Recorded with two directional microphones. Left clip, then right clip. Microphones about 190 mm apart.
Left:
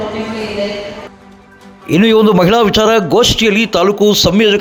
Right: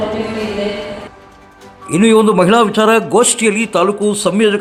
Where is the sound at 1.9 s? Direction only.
25° left (ahead or behind).